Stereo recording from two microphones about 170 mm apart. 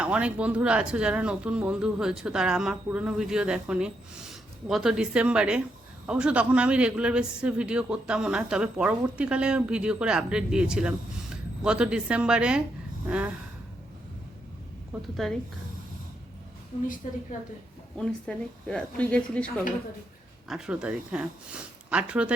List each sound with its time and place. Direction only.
0.0 s a man's voice: 5° right (ahead or behind)
13.1 s snort: 10° right (ahead or behind)
15.1 s a man's voice: centre (ahead or behind)
16.7 s a woman's voice: 40° left (ahead or behind)
17.9 s a man's voice: 5° left (ahead or behind)
20.5 s a man's voice: 5° right (ahead or behind)